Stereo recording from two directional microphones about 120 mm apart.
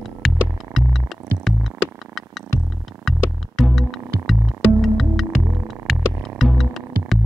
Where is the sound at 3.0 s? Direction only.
Centre (ahead or behind).